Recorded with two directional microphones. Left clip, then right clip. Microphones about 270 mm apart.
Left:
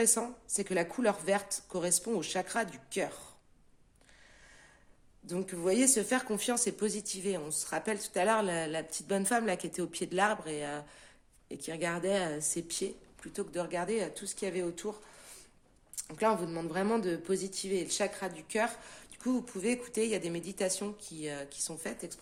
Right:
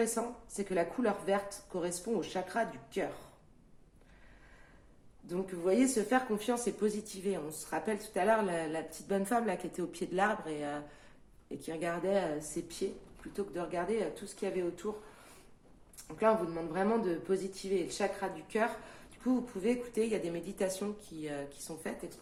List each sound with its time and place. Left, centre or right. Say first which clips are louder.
0.0 s speech: left 2 dB; left
5.2 s speech: left 1 dB; left
16.0 s speech: right 1 dB; left